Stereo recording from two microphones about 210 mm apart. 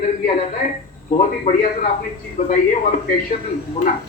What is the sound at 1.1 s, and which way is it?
A man's voice, 40° left (ahead or behind).